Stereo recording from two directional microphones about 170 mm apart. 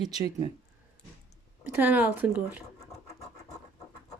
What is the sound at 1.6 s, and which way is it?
Speech, 10° right (ahead or behind).